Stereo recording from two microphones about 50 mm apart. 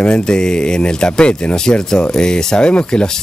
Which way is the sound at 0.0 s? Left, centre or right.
Centre.